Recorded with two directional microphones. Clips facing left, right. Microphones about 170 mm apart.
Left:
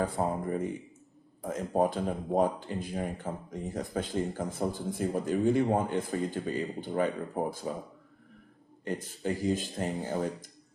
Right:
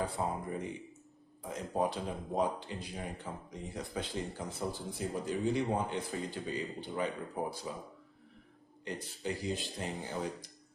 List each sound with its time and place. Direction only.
0.0 s speech: 50° left (ahead or behind)
8.8 s speech: 50° left (ahead or behind)